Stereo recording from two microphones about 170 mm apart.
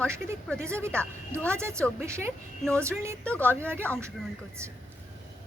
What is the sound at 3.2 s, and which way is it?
Speech, 10° left (ahead or behind).